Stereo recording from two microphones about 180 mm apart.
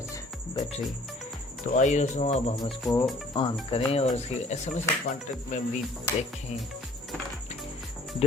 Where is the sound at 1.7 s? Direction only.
40° left (ahead or behind).